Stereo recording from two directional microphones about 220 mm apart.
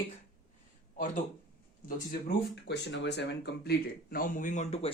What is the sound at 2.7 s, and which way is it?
Speech, 50° left (ahead or behind).